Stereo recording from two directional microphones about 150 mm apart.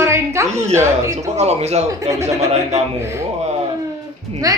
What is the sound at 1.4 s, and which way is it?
Speech, 45° right (ahead or behind).